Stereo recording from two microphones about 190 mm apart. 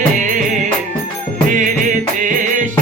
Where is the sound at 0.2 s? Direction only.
40° right (ahead or behind).